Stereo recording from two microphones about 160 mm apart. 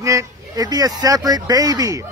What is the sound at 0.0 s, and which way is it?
A man's voice, 20° right (ahead or behind).